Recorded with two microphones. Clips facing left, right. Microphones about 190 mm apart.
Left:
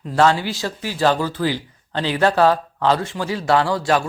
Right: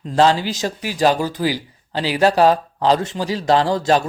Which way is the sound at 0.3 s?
15° right (ahead or behind).